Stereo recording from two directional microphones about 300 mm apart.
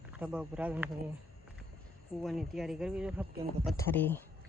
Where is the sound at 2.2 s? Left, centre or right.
Centre.